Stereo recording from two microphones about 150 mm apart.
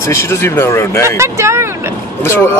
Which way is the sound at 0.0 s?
20° left (ahead or behind).